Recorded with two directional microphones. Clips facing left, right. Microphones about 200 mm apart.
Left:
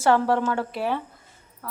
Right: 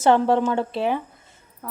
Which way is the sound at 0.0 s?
20° right (ahead or behind).